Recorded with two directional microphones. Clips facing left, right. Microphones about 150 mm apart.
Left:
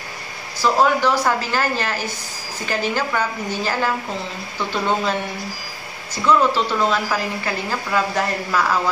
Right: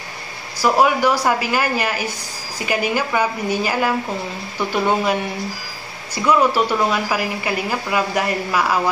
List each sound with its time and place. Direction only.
0.6 s a woman's voice: 10° right (ahead or behind)
6.1 s a woman's voice: 10° right (ahead or behind)